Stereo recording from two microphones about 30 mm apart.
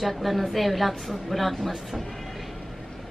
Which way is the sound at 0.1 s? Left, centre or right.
Centre.